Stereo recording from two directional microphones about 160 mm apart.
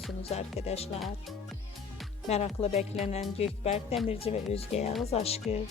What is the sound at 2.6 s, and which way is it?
Speech, 40° left (ahead or behind).